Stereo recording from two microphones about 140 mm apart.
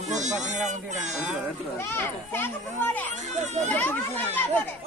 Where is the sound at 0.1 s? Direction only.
60° right (ahead or behind).